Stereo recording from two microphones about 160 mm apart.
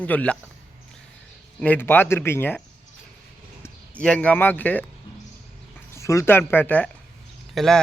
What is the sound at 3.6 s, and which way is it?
Speech, 5° left (ahead or behind).